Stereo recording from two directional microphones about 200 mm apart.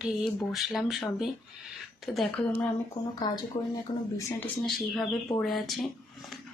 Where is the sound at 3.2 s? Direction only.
20° left (ahead or behind).